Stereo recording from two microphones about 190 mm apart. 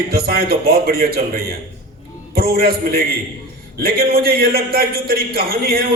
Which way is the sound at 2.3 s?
55° right (ahead or behind).